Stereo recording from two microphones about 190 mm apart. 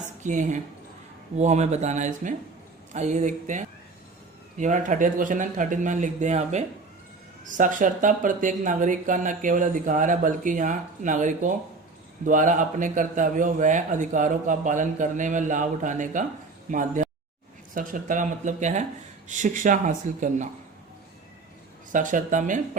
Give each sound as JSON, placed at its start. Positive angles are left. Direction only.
{"t": 0.2, "sound": "a woman's voice", "side_deg": -40}
{"t": 21.9, "sound": "speech", "side_deg": -45}